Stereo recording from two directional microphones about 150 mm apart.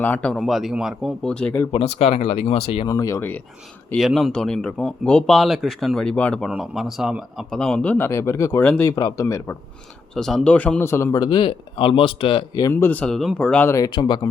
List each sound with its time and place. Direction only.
0.0 s speech: 10° left (ahead or behind)
1.7 s speech: 45° left (ahead or behind)
2.8 s speech: 20° left (ahead or behind)
3.9 s speech: centre (ahead or behind); by 9.6 s 15° left (ahead or behind)
10.2 s speech: 5° left (ahead or behind); by 12.6 s 35° left (ahead or behind)
12.6 s speech: 15° left (ahead or behind); by 14.3 s 30° left (ahead or behind)